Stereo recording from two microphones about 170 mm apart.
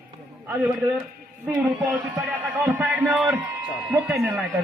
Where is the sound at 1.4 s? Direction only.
5° right (ahead or behind).